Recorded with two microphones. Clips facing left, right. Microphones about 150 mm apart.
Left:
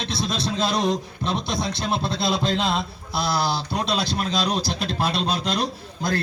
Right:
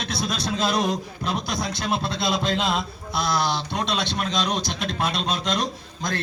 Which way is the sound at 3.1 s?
30° left (ahead or behind).